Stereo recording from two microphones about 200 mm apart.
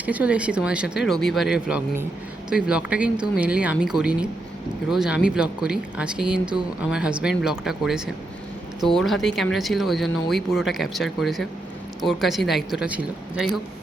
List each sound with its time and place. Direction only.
0.0 s speech: 5° right (ahead or behind)